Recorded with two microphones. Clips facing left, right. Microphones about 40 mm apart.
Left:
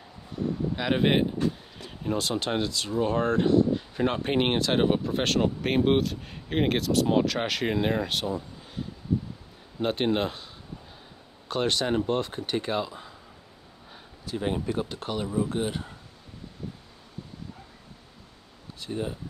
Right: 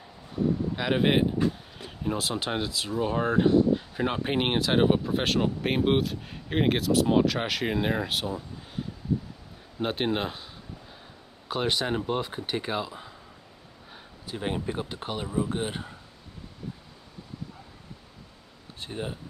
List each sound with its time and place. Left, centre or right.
0.7 s speech: centre
11.4 s speech: centre
14.2 s speech: centre
15.4 s speech: right
18.8 s speech: right